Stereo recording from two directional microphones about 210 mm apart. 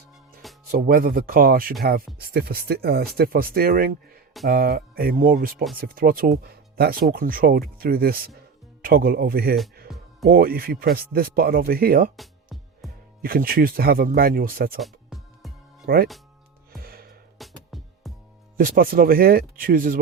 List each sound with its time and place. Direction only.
0.7 s speech: 45° right (ahead or behind)
9.9 s music: centre (ahead or behind)
10.2 s speech: 45° right (ahead or behind)
12.1 s music: centre (ahead or behind)
13.2 s speech: 45° right (ahead or behind)
14.8 s music: centre (ahead or behind)
15.9 s speech: 45° right (ahead or behind)
16.7 s music: 45° right (ahead or behind)
17.3 s music: centre (ahead or behind)
18.5 s speech: 45° right (ahead or behind)